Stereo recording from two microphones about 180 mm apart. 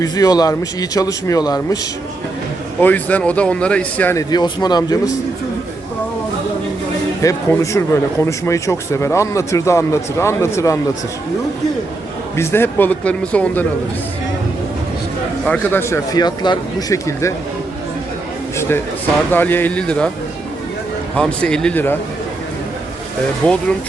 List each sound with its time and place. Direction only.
0.0 s speech: 20° left (ahead or behind)
2.8 s speech: 10° left (ahead or behind)
7.2 s speech: 15° left (ahead or behind)
12.4 s speech: 15° left (ahead or behind)
15.4 s speech: 10° left (ahead or behind)
19.3 s speech: 10° left (ahead or behind)
21.2 s speech: 5° left (ahead or behind)
23.4 s speech: 10° left (ahead or behind)